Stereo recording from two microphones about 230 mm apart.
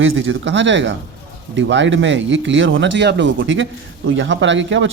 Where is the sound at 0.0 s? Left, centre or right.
Right.